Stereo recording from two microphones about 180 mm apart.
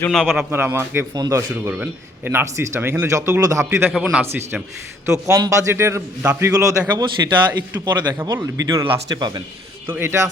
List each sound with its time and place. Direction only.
0.1 s a man's voice: centre (ahead or behind)
0.5 s speech: 15° right (ahead or behind)